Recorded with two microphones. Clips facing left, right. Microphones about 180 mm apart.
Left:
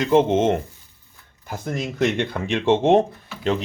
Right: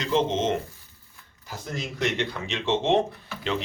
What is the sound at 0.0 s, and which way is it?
Speech, 55° left (ahead or behind).